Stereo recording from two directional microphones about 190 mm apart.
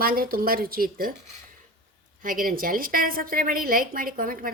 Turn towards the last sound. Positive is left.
turn(degrees=-45)  # may be behind; listen again after turning